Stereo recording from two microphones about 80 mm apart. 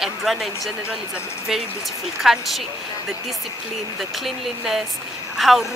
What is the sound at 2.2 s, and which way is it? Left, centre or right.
Speech, centre.